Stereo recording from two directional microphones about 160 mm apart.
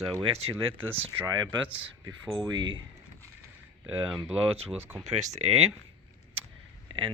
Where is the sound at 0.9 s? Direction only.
15° right (ahead or behind).